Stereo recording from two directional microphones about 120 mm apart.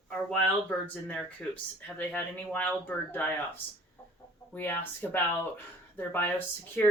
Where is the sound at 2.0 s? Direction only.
15° left (ahead or behind).